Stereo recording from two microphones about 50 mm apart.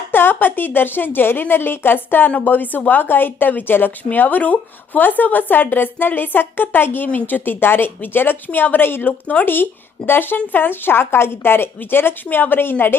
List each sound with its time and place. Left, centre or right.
0.1 s speech: left
9.0 s speech: left
10.1 s speech: left